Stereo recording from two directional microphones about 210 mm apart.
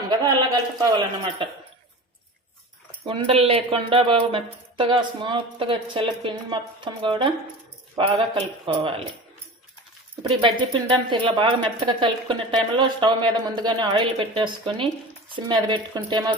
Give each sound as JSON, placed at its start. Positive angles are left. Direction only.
{"t": 0.8, "sound": "speech", "side_deg": -20}
{"t": 3.1, "sound": "speech", "side_deg": -25}
{"t": 10.2, "sound": "speech", "side_deg": -25}